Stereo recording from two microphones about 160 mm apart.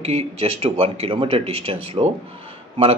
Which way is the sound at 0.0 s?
40° right (ahead or behind).